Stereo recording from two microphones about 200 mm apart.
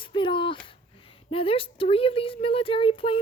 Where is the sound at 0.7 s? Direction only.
25° left (ahead or behind).